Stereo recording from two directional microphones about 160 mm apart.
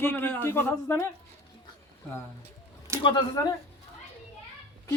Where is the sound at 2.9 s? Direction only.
15° right (ahead or behind).